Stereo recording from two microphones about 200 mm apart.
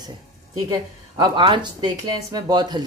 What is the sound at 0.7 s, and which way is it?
Speech, 20° right (ahead or behind).